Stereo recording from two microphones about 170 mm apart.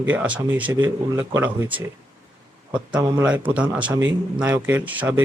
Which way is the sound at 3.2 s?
10° right (ahead or behind).